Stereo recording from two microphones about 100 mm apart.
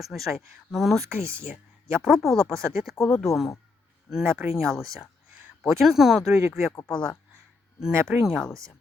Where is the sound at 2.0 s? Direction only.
Centre (ahead or behind).